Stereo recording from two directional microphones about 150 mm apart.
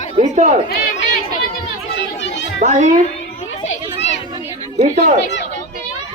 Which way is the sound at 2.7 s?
55° right (ahead or behind).